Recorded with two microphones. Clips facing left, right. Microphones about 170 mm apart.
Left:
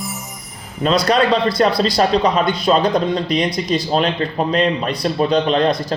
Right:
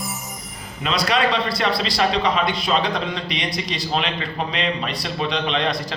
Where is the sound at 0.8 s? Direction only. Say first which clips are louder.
Left 6 dB; 40° left (ahead or behind).